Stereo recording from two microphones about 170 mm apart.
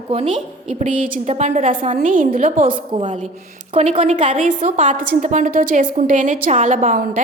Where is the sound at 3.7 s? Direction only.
40° right (ahead or behind).